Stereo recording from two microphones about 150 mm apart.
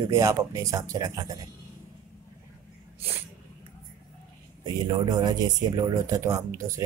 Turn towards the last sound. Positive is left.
turn(degrees=-20)  # may be behind; listen again after turning